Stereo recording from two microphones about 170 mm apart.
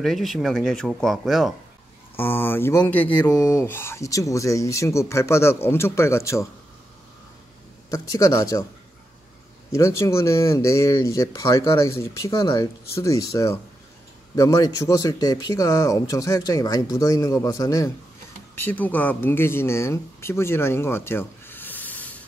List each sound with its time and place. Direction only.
0.0 s speech: centre (ahead or behind)
2.1 s speech: 10° left (ahead or behind)
3.2 s speech: 20° left (ahead or behind)
7.9 s speech: 20° left (ahead or behind)
9.7 s speech: 15° left (ahead or behind)